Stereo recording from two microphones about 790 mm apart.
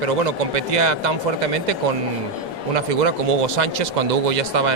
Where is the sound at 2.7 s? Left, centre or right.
Right.